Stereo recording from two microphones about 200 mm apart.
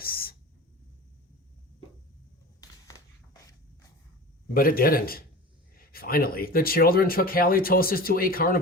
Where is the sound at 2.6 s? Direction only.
20° left (ahead or behind).